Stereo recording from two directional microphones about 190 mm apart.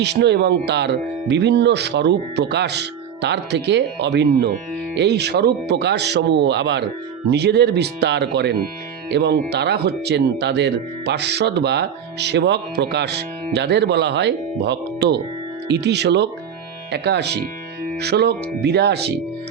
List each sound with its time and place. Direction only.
0.0 s speech: 65° right (ahead or behind)